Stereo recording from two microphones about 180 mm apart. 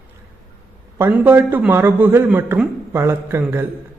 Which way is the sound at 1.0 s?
15° right (ahead or behind).